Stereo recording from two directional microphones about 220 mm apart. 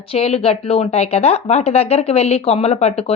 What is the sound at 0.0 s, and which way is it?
Speech, 25° left (ahead or behind).